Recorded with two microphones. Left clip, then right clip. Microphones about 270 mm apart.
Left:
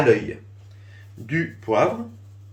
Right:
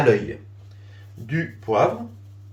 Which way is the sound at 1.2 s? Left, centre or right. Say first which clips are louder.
Left 1 dB; centre.